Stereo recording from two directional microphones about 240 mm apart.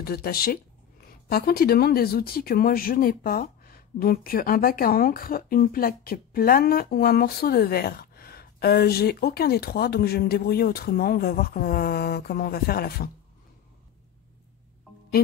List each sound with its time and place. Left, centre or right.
0.0 s speech: left